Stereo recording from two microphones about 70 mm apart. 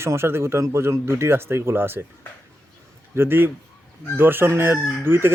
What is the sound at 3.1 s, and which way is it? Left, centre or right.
Chicken, right.